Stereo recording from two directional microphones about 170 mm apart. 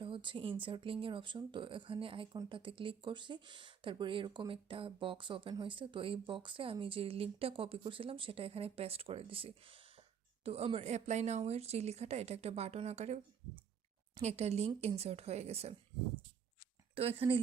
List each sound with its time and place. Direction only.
0.0 s a sound: 30° right (ahead or behind)
0.6 s speech: 30° right (ahead or behind)
14.2 s speech: 40° right (ahead or behind)
16.9 s speech: 35° right (ahead or behind)